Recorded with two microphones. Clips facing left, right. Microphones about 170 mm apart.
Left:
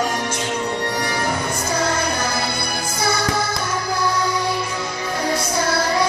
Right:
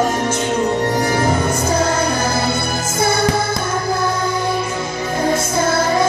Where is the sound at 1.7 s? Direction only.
25° right (ahead or behind).